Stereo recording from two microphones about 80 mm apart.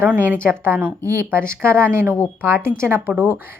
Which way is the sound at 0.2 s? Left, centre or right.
Right.